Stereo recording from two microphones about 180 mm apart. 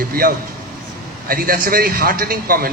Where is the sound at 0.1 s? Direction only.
55° right (ahead or behind).